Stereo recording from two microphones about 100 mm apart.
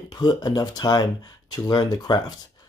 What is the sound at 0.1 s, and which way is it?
Speech, 45° left (ahead or behind).